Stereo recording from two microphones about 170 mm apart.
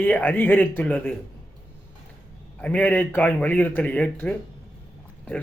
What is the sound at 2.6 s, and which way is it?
A man's voice, 10° left (ahead or behind).